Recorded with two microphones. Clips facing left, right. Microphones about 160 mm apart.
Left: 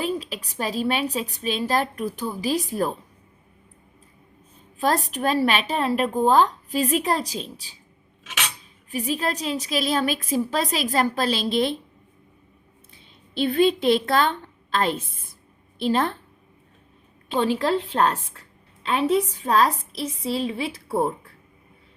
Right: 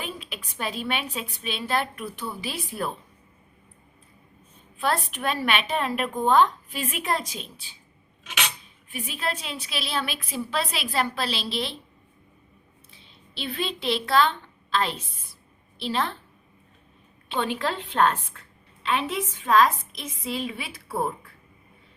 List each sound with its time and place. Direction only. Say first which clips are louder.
0.0 s a woman's voice: left 9 dB; 35° left (ahead or behind)
4.8 s a woman's voice: left 4 dB; 40° left (ahead or behind)
8.9 s a woman's voice: left 6 dB; 40° left (ahead or behind)
13.3 s a woman's voice: left 12 dB; 45° left (ahead or behind)
17.2 s a woman's voice: left 5 dB; 35° left (ahead or behind)